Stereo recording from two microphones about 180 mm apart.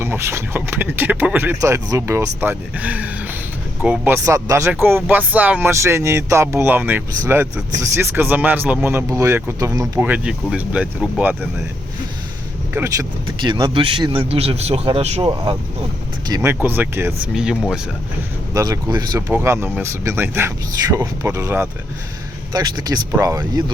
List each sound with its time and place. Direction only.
0.0 s speech: 15° right (ahead or behind)
12.7 s speech: 15° right (ahead or behind)
13.4 s a man's voice: 25° right (ahead or behind)
16.2 s speech: 15° right (ahead or behind)
18.5 s speech: 20° right (ahead or behind)